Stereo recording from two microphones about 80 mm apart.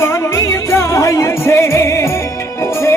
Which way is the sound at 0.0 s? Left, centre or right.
Left.